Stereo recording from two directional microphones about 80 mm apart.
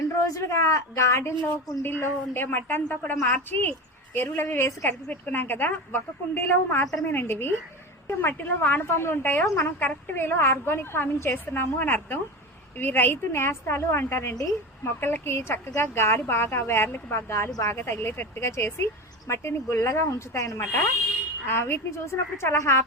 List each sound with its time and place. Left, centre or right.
0.3 s a woman's voice: left